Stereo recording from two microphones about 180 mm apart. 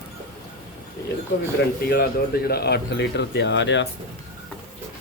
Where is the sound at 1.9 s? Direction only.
60° left (ahead or behind); by 3.8 s 85° left.